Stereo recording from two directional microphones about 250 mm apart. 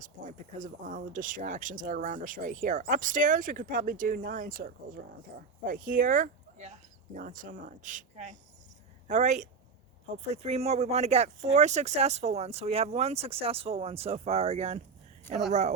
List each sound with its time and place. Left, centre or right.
0.0 s speech: right